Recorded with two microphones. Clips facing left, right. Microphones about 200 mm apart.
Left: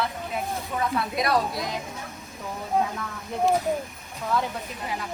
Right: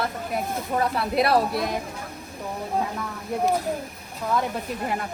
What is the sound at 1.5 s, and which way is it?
Speech, 60° right (ahead or behind).